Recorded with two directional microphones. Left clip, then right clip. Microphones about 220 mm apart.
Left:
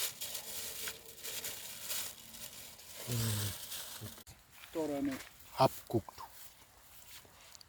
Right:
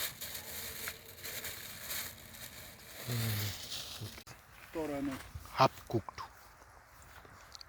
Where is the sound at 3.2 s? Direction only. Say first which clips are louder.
Right 1 dB; 25° left (ahead or behind).